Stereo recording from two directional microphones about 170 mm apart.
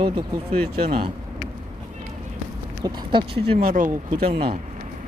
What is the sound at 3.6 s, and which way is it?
Speech, 50° right (ahead or behind).